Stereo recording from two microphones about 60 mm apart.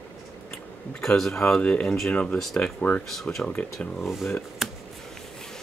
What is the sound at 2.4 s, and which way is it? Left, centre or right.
A man's voice, centre.